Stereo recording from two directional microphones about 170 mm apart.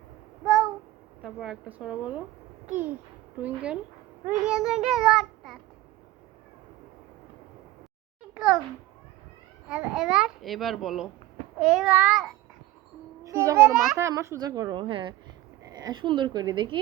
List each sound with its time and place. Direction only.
1.2 s a child's voice: 5° right (ahead or behind)
8.4 s babbling: 5° right (ahead or behind)
9.6 s a child's voice: 5° right (ahead or behind)
13.2 s a child's voice: 20° right (ahead or behind)